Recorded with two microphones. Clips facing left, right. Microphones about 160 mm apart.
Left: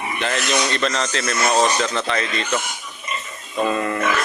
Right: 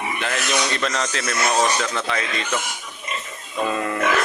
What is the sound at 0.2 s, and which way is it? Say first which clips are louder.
Speech: left 4 dB; 5° right (ahead or behind).